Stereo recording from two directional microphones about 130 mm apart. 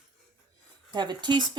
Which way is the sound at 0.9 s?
35° right (ahead or behind).